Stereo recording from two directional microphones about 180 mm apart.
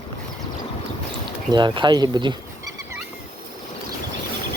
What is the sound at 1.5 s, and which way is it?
Speech, 25° right (ahead or behind).